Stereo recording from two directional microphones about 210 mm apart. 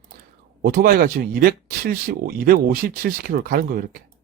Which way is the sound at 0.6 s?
45° right (ahead or behind).